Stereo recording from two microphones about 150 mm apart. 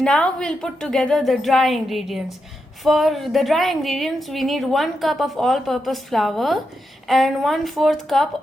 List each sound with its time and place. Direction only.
0.0 s a woman's voice: 5° left (ahead or behind)